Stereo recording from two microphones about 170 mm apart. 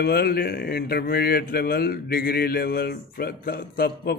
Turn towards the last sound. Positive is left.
turn(degrees=65)  # may be behind; listen again after turning